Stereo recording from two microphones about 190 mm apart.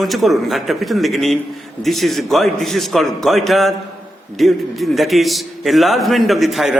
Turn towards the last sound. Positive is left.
turn(degrees=0)  # may be behind; listen again after turning